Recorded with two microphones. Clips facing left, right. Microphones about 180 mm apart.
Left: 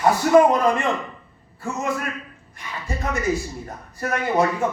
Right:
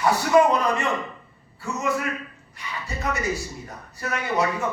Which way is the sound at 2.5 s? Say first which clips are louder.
Left 3 dB; 50° left (ahead or behind).